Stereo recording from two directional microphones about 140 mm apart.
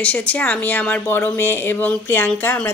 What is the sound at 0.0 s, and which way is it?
Speech, 10° left (ahead or behind).